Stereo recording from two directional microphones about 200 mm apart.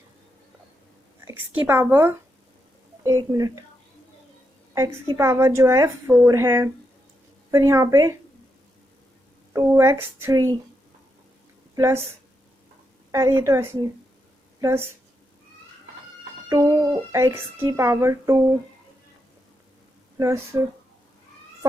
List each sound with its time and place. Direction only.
1.2 s a woman's voice: 10° right (ahead or behind)
4.7 s speech: 15° right (ahead or behind)
9.5 s speech: 15° right (ahead or behind)
11.7 s a woman's voice: 15° right (ahead or behind)
13.1 s a woman's voice: 15° right (ahead or behind)
16.5 s speech: 15° right (ahead or behind)
20.1 s speech: 15° right (ahead or behind)